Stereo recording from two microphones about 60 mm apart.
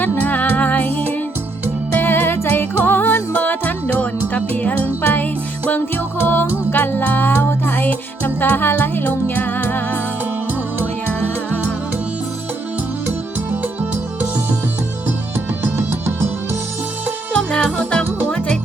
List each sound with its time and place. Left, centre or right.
0.0 s music: left
13.5 s music: right
17.3 s music: centre